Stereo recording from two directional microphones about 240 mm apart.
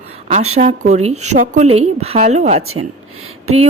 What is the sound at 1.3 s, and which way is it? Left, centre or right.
Speech, right.